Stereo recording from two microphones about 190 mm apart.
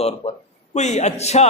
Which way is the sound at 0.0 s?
35° left (ahead or behind).